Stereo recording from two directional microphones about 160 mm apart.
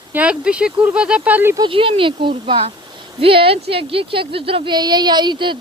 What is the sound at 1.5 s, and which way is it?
Speech, 30° right (ahead or behind).